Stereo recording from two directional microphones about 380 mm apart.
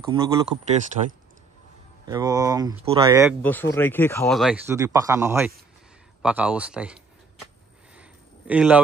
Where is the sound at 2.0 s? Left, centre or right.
Centre.